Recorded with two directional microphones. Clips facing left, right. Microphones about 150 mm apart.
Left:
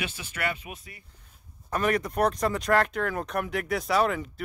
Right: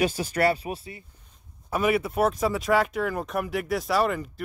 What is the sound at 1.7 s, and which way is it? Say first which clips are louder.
Speech: right 2 dB; 5° right (ahead or behind).